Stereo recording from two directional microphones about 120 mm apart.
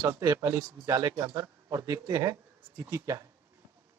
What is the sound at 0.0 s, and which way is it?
A child's voice, 30° right (ahead or behind).